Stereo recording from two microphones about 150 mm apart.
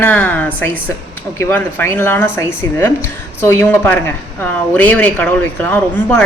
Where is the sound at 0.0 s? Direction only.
10° left (ahead or behind).